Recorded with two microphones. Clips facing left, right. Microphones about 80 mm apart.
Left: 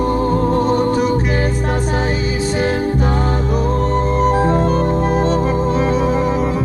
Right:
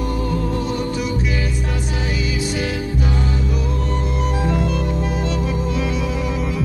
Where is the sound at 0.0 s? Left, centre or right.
Left.